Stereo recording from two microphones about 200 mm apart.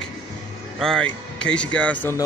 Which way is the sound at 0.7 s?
5° left (ahead or behind).